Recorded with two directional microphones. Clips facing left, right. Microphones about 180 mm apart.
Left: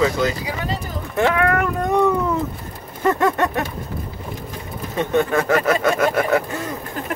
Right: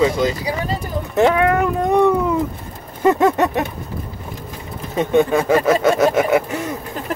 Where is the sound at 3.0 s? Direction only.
10° right (ahead or behind).